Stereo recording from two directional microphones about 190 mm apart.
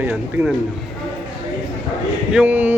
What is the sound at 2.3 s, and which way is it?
Speech, 5° right (ahead or behind).